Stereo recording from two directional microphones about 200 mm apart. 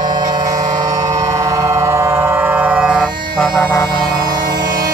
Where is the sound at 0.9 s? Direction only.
15° right (ahead or behind); by 3.4 s centre (ahead or behind).